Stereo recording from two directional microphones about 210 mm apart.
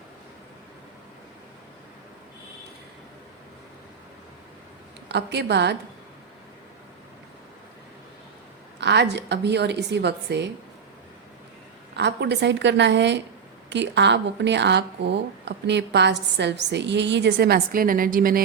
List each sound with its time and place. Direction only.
5.0 s a woman's voice: 55° right (ahead or behind)
8.8 s a woman's voice: 55° right (ahead or behind)
11.9 s speech: 55° right (ahead or behind)